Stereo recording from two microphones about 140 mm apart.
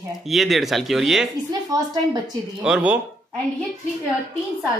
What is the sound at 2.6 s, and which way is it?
Speech, 5° right (ahead or behind).